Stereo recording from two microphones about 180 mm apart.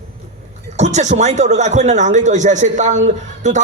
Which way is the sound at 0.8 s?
40° right (ahead or behind).